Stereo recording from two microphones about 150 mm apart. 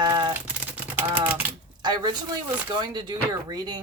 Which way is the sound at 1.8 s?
30° right (ahead or behind).